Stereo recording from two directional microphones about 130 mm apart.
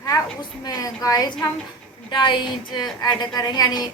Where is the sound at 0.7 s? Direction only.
30° left (ahead or behind).